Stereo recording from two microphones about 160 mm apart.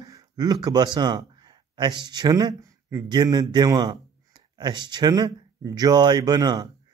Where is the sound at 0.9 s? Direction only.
25° right (ahead or behind).